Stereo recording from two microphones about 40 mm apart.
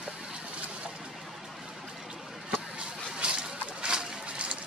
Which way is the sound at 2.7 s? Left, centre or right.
Right.